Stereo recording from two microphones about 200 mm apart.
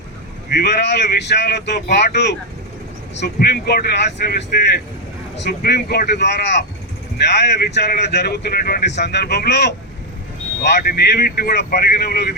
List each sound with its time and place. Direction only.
0.6 s speech: 60° left (ahead or behind)
5.4 s speech: 55° left (ahead or behind)